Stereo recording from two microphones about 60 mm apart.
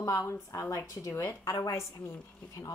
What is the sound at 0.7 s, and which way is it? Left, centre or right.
Speech, left.